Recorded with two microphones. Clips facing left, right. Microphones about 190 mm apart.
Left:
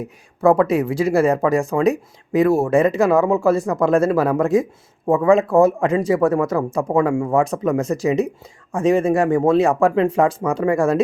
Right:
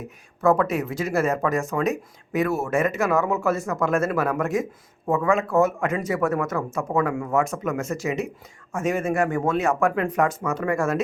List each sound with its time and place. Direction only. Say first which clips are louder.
0.0 s speech: left 5 dB; 30° left (ahead or behind)